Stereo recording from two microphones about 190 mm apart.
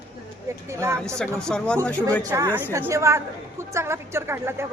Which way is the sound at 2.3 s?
15° right (ahead or behind).